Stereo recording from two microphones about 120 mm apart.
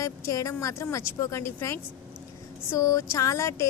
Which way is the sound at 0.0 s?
25° left (ahead or behind).